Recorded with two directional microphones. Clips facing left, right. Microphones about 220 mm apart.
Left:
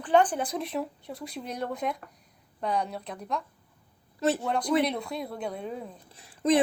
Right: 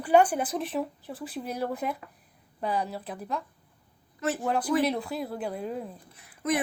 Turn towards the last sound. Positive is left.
turn(degrees=30)  # may be behind; listen again after turning